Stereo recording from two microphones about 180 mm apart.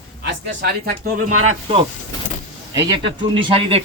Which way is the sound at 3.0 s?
30° right (ahead or behind).